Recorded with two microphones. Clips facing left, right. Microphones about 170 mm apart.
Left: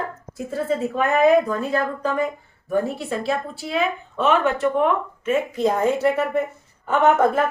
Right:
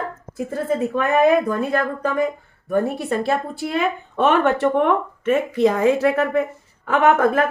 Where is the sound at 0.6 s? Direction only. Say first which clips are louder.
Right 3 dB; 55° right (ahead or behind).